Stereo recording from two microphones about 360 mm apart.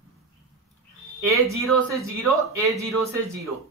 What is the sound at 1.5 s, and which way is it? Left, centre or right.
Speech, centre.